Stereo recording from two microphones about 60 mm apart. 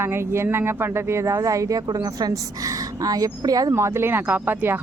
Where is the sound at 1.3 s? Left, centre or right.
Right.